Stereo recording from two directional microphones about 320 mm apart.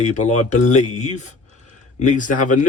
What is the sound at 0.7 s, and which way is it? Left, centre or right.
Speech, left.